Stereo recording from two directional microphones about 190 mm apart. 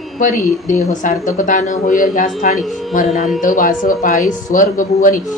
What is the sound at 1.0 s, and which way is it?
Speech, 45° left (ahead or behind).